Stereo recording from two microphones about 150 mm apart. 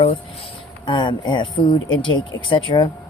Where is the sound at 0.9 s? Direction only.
30° left (ahead or behind).